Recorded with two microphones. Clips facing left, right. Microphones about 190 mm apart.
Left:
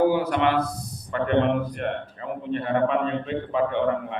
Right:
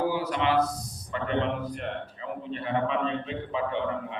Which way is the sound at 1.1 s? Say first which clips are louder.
Left 7 dB; 55° left (ahead or behind).